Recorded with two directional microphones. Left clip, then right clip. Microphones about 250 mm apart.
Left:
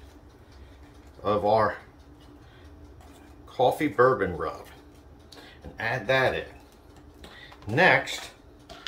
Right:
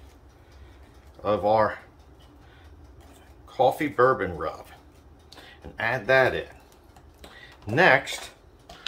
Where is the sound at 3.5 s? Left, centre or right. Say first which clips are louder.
Right 1 dB; centre.